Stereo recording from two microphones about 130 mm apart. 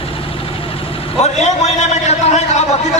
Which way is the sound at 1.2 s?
60° left (ahead or behind).